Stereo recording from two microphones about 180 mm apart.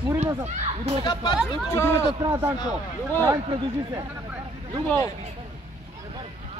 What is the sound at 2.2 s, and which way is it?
Speech, 15° right (ahead or behind).